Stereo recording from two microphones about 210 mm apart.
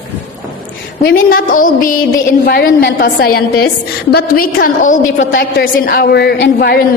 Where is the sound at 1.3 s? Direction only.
40° left (ahead or behind).